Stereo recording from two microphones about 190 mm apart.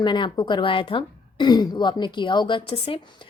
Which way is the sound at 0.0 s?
25° left (ahead or behind).